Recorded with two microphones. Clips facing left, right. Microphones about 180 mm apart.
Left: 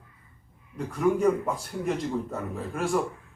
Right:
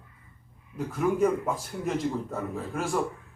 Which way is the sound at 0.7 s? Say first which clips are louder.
Left 2 dB; centre (ahead or behind).